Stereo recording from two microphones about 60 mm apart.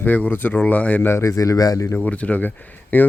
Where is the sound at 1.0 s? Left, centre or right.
Left.